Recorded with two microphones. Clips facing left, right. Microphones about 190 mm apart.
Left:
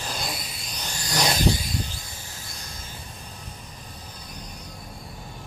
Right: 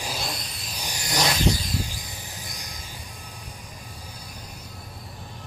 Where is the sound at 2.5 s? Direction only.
15° right (ahead or behind).